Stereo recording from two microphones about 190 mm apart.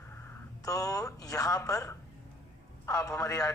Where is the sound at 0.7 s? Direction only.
15° left (ahead or behind).